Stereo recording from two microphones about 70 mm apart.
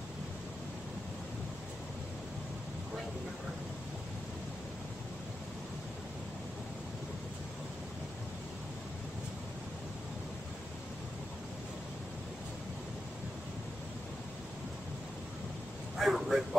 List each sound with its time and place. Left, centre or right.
16.0 s vehicle: centre